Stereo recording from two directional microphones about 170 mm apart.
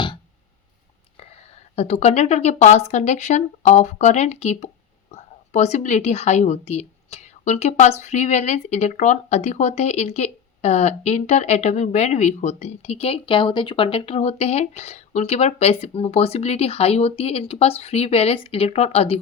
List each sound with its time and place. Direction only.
1.7 s a woman's voice: 40° left (ahead or behind)